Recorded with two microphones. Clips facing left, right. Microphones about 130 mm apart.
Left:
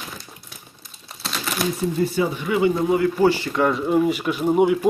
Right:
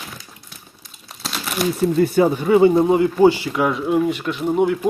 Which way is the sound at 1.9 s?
55° right (ahead or behind).